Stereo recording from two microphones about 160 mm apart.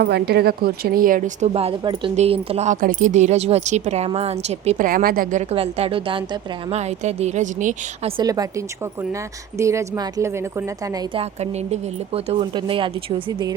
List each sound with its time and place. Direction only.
0.0 s a woman's voice: 85° right; by 1.5 s 60° right (ahead or behind)
1.5 s speech: 35° right (ahead or behind)
2.8 s a woman's voice: 50° right (ahead or behind)
4.9 s a woman's voice: 65° right (ahead or behind)
8.0 s a woman's voice: 30° right (ahead or behind)
11.1 s speech: 40° right (ahead or behind)